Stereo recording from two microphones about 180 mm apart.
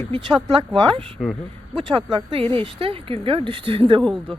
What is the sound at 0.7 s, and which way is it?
Speech, 25° right (ahead or behind).